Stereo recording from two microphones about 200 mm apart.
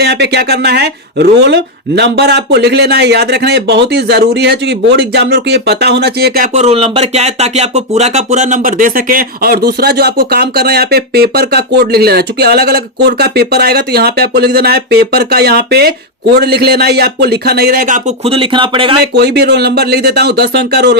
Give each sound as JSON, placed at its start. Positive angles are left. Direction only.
{"t": 0.0, "sound": "speech", "side_deg": -55}
{"t": 18.3, "sound": "speech", "side_deg": -25}
{"t": 19.1, "sound": "speech", "side_deg": -55}